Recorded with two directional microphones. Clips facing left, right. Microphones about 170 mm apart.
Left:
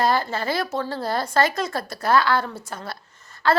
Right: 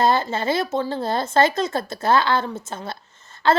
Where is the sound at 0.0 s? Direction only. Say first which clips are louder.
Right 2 dB; 25° right (ahead or behind).